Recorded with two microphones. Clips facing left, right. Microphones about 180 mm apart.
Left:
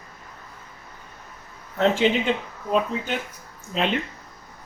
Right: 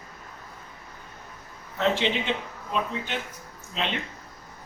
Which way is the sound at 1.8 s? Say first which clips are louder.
Left 5 dB; 45° left (ahead or behind).